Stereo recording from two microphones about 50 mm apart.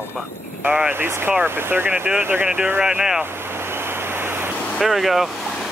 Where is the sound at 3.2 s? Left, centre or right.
Right.